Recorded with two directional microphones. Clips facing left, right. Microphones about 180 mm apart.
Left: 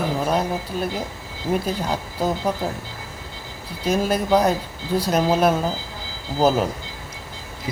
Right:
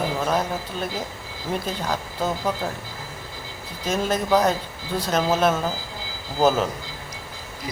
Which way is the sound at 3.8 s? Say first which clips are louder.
Left 3 dB; 10° left (ahead or behind).